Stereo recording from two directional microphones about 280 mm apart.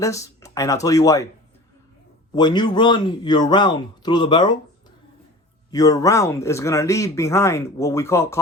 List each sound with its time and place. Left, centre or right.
0.0 s speech: centre
2.3 s speech: centre
5.7 s speech: centre